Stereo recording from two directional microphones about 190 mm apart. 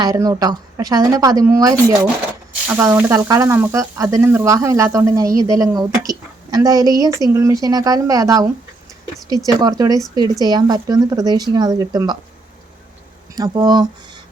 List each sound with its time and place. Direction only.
0.0 s speech: 20° right (ahead or behind)
2.6 s frying: 15° right (ahead or behind)
6.1 s speech: 20° right (ahead or behind)
9.5 s speech: 20° right (ahead or behind)
13.3 s speech: 20° right (ahead or behind)